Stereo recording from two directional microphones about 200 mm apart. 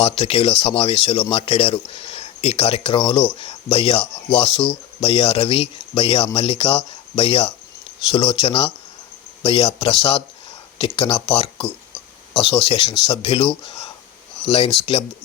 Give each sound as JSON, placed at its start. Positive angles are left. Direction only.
{"t": 0.0, "sound": "speech", "side_deg": 30}